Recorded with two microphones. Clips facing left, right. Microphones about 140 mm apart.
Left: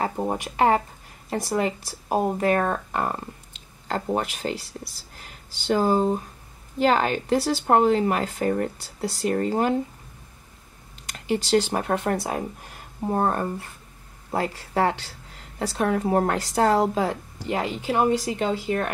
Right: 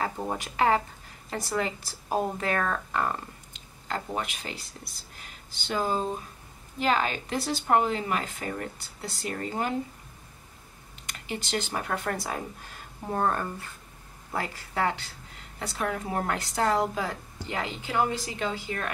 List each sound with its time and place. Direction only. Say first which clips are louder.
0.0 s a woman's voice: left 5 dB; 30° left (ahead or behind)
2.3 s speech: left 6 dB; 35° left (ahead or behind)
5.7 s speech: left 8 dB; 35° left (ahead or behind)
11.3 s a woman's voice: left 10 dB; 35° left (ahead or behind)